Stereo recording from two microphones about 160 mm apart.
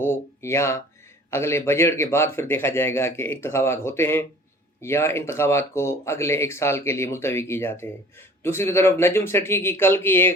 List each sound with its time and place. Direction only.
0.0 s speech: 15° left (ahead or behind)